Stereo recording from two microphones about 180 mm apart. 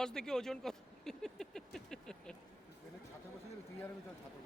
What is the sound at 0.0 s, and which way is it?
Speech, 5° left (ahead or behind).